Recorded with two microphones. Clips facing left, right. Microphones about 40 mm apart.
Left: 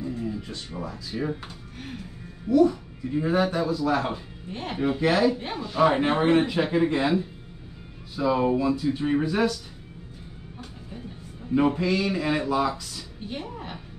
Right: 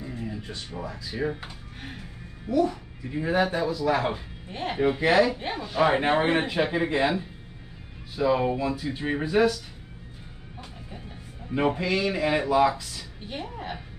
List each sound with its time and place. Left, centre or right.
0.0 s a sound: centre
0.7 s speech: centre
2.6 s speech: centre
3.3 s speech: right
11.5 s speech: centre